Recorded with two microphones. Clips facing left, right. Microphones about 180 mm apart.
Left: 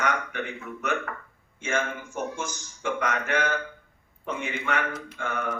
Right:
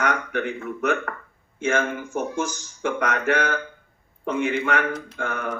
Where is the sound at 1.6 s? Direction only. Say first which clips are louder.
Right 6 dB; 50° right (ahead or behind).